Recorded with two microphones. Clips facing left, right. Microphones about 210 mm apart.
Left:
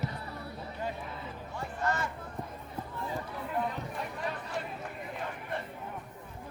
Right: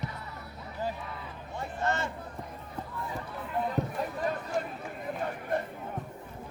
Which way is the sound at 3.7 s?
40° right (ahead or behind).